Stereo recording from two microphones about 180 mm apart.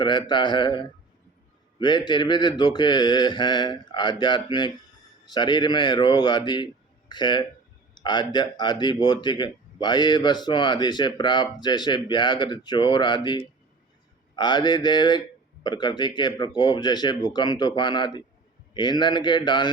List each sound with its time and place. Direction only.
0.0 s speech: 25° left (ahead or behind)